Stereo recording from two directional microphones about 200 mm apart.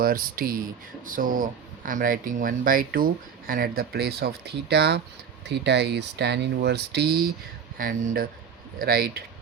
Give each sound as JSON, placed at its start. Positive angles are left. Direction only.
{"t": 0.0, "sound": "speech", "side_deg": -45}
{"t": 8.8, "sound": "speech", "side_deg": -50}